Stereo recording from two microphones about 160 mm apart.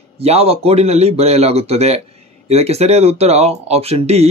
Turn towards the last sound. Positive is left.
turn(degrees=-40)  # may be behind; listen again after turning